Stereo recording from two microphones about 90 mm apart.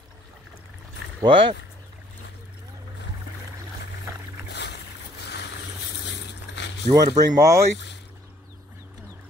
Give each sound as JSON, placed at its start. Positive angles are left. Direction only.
{"t": 1.2, "sound": "speech", "side_deg": -80}
{"t": 6.9, "sound": "speech", "side_deg": -40}